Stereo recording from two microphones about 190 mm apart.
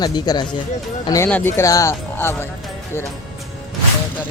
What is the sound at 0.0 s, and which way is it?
Speech, 20° left (ahead or behind).